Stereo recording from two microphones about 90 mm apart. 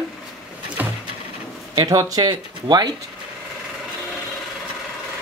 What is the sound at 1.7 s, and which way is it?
Speech, 45° right (ahead or behind).